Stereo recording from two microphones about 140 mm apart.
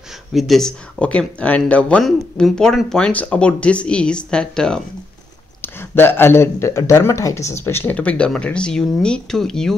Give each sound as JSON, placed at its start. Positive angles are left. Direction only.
{"t": 0.3, "sound": "speech", "side_deg": 0}
{"t": 5.6, "sound": "speech", "side_deg": 15}